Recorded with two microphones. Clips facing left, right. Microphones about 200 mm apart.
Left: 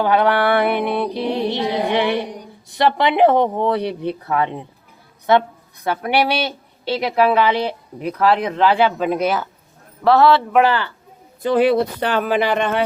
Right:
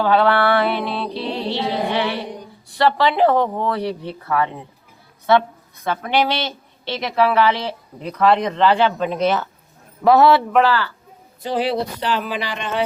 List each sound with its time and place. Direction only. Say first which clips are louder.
0.0 s music: even; 15° left (ahead or behind)
2.7 s a woman's voice: left 1 dB; 20° left (ahead or behind)
5.8 s speech: left 1 dB; 10° left (ahead or behind)
10.1 s a man's voice: even; 20° right (ahead or behind)
10.6 s a woman's voice: left 1 dB; 20° left (ahead or behind)
11.4 s speech: left 6 dB; 55° left (ahead or behind)